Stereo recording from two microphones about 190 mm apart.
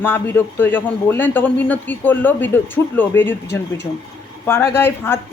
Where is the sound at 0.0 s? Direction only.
10° left (ahead or behind).